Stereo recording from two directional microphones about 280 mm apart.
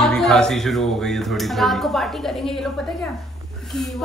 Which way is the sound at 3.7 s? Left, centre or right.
Centre.